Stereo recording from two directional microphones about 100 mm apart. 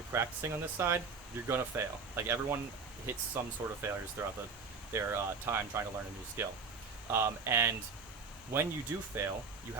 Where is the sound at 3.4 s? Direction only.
25° right (ahead or behind).